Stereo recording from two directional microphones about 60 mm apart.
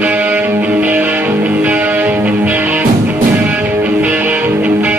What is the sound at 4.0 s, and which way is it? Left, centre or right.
Music, right.